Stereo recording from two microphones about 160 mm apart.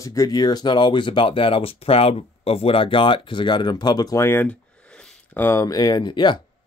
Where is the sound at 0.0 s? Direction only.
20° left (ahead or behind).